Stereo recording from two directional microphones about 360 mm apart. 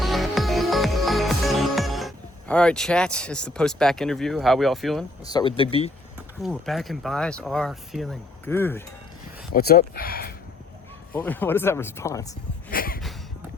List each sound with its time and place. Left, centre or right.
0.0 s music: centre
6.4 s speech: centre
9.5 s speech: left
11.1 s speech: centre
12.7 s a sound: left